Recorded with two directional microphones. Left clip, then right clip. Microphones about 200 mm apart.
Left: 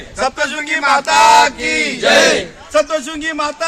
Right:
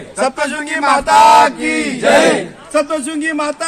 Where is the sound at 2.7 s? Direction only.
Centre (ahead or behind).